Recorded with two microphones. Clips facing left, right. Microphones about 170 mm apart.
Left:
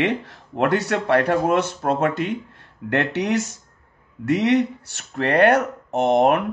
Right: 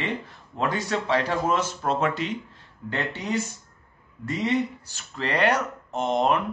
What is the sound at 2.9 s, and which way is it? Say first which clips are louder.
A man's voice: left 7 dB; 75° left (ahead or behind).